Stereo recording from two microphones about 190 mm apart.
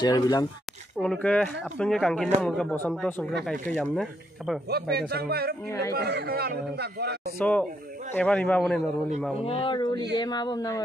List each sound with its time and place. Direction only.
0.0 s speech: 20° left (ahead or behind)
0.9 s speech: 5° left (ahead or behind)
4.6 s speech: 55° right (ahead or behind)
5.7 s speech: 15° left (ahead or behind)
5.9 s speech: 60° right (ahead or behind)
7.3 s speech: 5° left (ahead or behind)
9.4 s speech: 30° left (ahead or behind)